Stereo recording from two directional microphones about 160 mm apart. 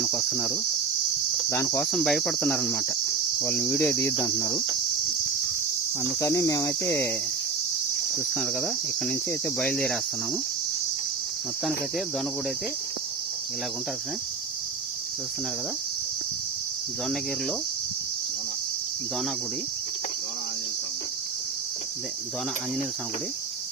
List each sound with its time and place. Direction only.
0.2 s cricket: centre (ahead or behind)
1.5 s cricket: 15° left (ahead or behind)
1.8 s cricket: centre (ahead or behind); by 4.6 s 15° left (ahead or behind)
6.0 s cricket: 20° left (ahead or behind)
8.4 s cricket: centre (ahead or behind)